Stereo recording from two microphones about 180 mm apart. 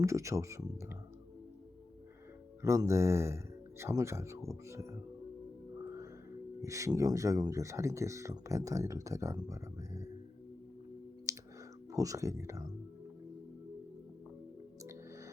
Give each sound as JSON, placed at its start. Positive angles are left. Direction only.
{"t": 0.0, "sound": "speech", "side_deg": -15}
{"t": 2.6, "sound": "speech", "side_deg": -15}
{"t": 6.6, "sound": "speech", "side_deg": -15}
{"t": 11.3, "sound": "clicking", "side_deg": -15}
{"t": 11.9, "sound": "speech", "side_deg": -20}